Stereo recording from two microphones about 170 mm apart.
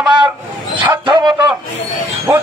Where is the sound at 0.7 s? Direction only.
30° right (ahead or behind).